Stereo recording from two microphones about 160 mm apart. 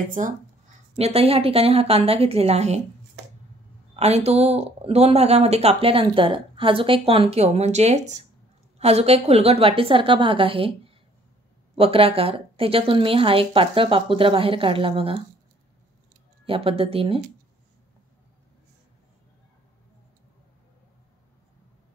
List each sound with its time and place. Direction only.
0.2 s speech: 50° right (ahead or behind)
0.9 s speech: 40° right (ahead or behind)
3.9 s speech: 40° right (ahead or behind)
16.4 s speech: 35° right (ahead or behind)